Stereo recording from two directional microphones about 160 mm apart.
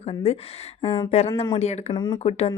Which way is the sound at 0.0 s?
40° left (ahead or behind).